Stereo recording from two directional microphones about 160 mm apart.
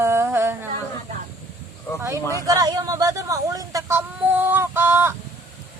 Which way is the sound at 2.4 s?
25° right (ahead or behind).